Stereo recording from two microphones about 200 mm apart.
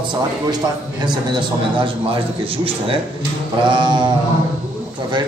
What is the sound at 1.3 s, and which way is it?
Speech, 25° right (ahead or behind).